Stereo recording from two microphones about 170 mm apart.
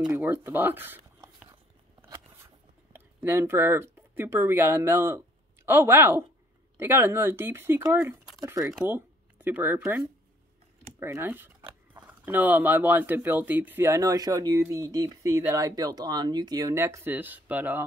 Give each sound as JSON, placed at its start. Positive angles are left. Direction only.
{"t": 0.1, "sound": "speech", "side_deg": -10}
{"t": 2.0, "sound": "a sound", "side_deg": -15}
{"t": 5.7, "sound": "speech", "side_deg": -15}